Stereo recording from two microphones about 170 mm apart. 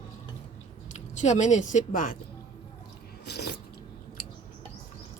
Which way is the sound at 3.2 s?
75° left (ahead or behind).